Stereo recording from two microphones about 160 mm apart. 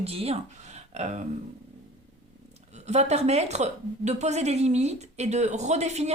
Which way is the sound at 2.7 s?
45° right (ahead or behind).